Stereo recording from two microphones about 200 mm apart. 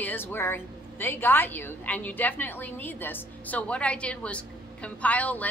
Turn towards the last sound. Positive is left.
turn(degrees=10)  # may be behind; listen again after turning